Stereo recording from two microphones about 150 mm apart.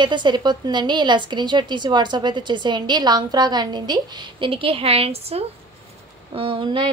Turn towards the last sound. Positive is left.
turn(degrees=-35)  # may be behind; listen again after turning